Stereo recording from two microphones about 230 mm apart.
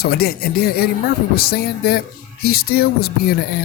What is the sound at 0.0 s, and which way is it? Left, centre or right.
Speech, left.